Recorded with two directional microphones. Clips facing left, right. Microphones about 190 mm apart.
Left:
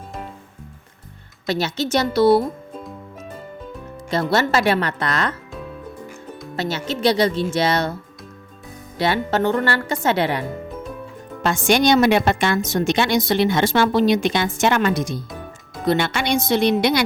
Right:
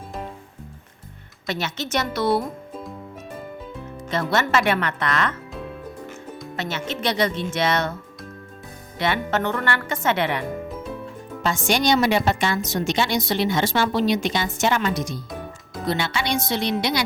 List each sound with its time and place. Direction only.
1.5 s speech: 35° left (ahead or behind)
4.1 s speech: 35° left (ahead or behind)
6.6 s speech: 35° left (ahead or behind)
9.0 s speech: 35° left (ahead or behind)
11.4 s a woman's voice: 55° left (ahead or behind)